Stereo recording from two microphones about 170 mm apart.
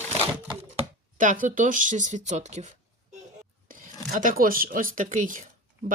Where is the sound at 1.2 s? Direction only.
50° right (ahead or behind).